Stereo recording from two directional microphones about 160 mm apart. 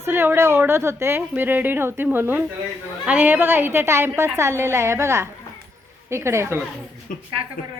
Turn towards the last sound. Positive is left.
turn(degrees=60)  # may be behind; listen again after turning